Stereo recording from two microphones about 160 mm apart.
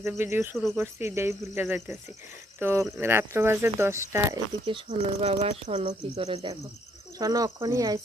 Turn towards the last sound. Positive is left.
turn(degrees=-20)  # may be behind; listen again after turning